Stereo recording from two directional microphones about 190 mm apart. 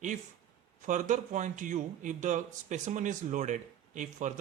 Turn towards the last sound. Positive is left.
turn(degrees=-40)  # may be behind; listen again after turning